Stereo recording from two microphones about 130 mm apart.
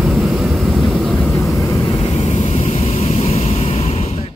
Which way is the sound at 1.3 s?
25° left (ahead or behind).